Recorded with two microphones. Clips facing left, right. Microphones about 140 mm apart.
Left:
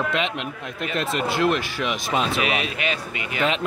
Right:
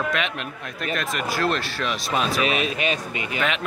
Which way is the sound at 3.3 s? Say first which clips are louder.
Left 3 dB; 30° left (ahead or behind).